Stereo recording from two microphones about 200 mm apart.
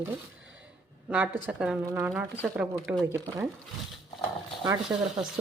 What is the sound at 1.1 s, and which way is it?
Speech, 5° right (ahead or behind).